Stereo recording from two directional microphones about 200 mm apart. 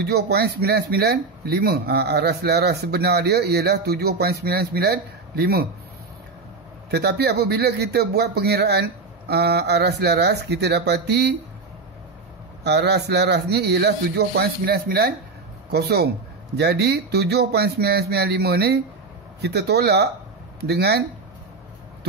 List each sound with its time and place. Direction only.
0.0 s speech: 55° right (ahead or behind)
6.9 s a man's voice: 55° right (ahead or behind)
12.6 s a man's voice: 55° right (ahead or behind)